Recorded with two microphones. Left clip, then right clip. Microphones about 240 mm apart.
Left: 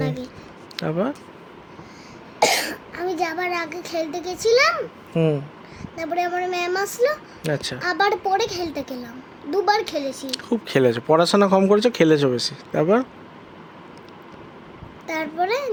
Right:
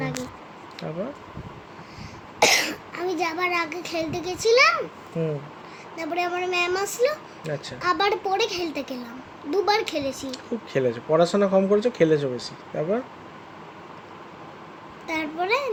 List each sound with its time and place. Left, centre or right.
0.8 s speech: left
2.4 s a child's voice: centre
5.2 s speech: left
6.0 s a woman's voice: centre
7.4 s speech: left
7.8 s a woman's voice: centre
10.2 s speech: left
15.0 s a sound: centre